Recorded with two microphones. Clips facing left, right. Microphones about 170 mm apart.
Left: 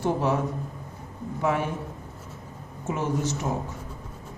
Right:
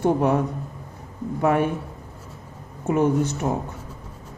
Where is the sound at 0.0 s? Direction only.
55° right (ahead or behind).